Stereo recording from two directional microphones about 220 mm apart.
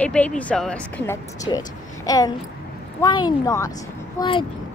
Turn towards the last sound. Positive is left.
turn(degrees=20)  # may be behind; listen again after turning